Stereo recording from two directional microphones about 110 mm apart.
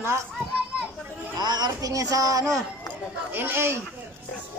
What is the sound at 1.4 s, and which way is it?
Speech, 40° right (ahead or behind).